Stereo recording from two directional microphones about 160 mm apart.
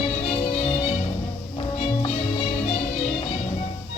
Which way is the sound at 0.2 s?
40° left (ahead or behind).